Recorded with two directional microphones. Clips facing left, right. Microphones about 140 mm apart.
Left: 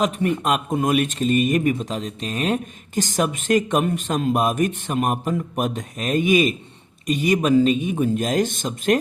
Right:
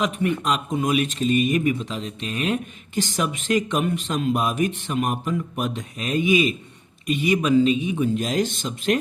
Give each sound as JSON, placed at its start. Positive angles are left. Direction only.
{"t": 0.0, "sound": "speech", "side_deg": 40}